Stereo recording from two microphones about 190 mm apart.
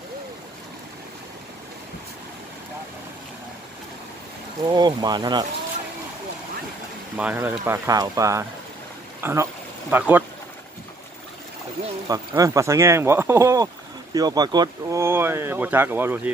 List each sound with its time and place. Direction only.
4.6 s speech: 20° right (ahead or behind)
7.2 s speech: 10° right (ahead or behind)
12.1 s speech: 15° right (ahead or behind)